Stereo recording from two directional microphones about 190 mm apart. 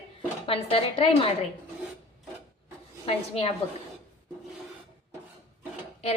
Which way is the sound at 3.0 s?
30° left (ahead or behind).